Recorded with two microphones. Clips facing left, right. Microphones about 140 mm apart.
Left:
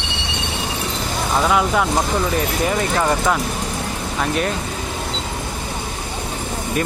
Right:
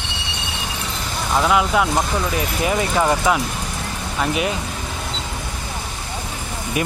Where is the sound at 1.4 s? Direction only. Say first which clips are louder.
Right 1 dB; centre (ahead or behind).